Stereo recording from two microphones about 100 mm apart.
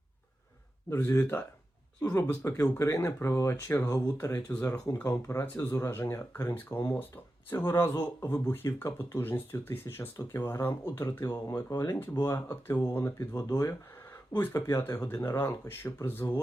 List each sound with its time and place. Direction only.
0.9 s speech: 25° left (ahead or behind)
11.3 s speech: 35° left (ahead or behind)